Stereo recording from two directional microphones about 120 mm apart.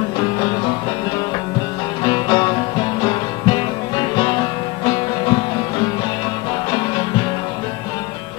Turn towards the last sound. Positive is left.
turn(degrees=35)  # may be behind; listen again after turning